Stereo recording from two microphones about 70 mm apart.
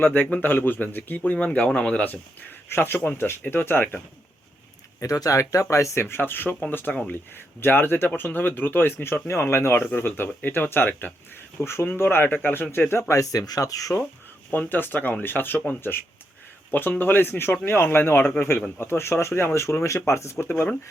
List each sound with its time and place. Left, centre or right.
0.0 s speech: left
2.0 s speech: left
4.9 s speech: left
9.8 s speech: left
13.4 s speech: left
14.5 s speech: left
20.4 s speech: left